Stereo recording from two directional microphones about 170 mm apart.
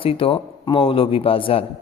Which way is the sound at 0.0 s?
35° left (ahead or behind).